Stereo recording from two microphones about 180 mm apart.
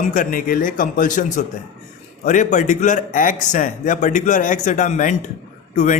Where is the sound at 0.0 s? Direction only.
50° left (ahead or behind).